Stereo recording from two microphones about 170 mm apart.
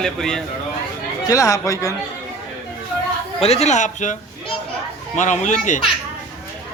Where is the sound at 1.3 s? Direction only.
20° left (ahead or behind).